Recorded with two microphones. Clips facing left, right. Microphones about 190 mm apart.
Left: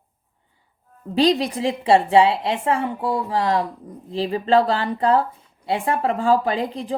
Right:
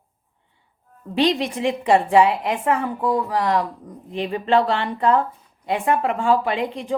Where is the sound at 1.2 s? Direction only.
35° left (ahead or behind).